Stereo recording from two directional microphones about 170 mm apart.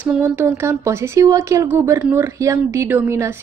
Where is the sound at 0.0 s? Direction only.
5° right (ahead or behind).